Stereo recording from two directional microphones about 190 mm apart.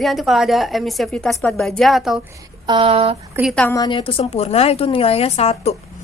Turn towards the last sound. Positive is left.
turn(degrees=35)  # may be behind; listen again after turning